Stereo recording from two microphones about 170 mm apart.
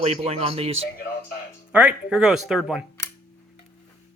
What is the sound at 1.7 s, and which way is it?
Speech, 10° right (ahead or behind).